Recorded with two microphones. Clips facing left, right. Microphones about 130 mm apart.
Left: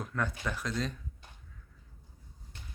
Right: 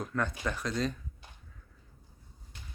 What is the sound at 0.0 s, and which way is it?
Speech, 5° left (ahead or behind).